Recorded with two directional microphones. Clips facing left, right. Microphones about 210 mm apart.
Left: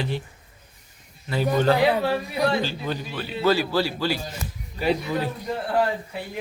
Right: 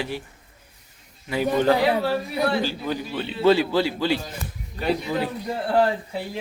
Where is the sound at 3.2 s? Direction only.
25° right (ahead or behind).